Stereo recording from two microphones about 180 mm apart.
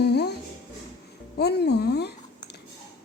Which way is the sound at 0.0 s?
65° left (ahead or behind).